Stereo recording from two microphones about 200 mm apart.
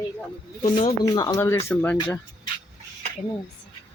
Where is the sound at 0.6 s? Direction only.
30° left (ahead or behind); by 2.2 s 10° left (ahead or behind).